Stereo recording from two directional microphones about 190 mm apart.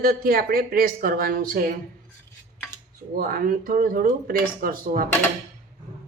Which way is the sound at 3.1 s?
50° right (ahead or behind).